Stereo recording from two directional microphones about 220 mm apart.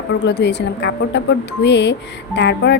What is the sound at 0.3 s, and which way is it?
Speech, 50° left (ahead or behind).